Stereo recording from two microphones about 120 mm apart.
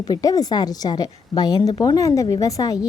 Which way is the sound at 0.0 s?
30° left (ahead or behind).